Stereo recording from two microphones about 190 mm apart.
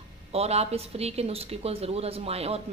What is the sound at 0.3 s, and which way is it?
A woman's voice, 35° right (ahead or behind).